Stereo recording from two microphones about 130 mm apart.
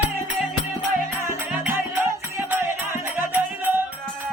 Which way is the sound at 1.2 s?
15° right (ahead or behind).